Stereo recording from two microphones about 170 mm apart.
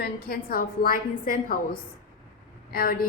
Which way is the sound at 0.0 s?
65° left (ahead or behind).